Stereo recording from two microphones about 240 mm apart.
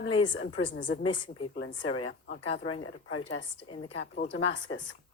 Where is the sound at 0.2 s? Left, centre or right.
Left.